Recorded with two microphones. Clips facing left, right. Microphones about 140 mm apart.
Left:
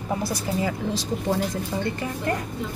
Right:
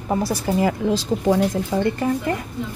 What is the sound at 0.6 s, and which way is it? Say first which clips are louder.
Speech: right 6 dB; 75° right (ahead or behind).